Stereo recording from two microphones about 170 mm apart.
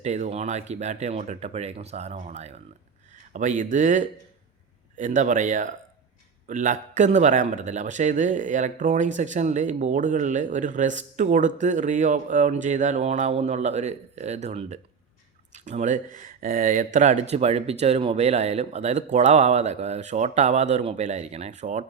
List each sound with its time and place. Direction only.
0.0 s speech: 45° right (ahead or behind)